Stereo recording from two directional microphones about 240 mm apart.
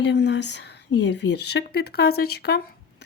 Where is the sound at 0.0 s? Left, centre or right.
Left.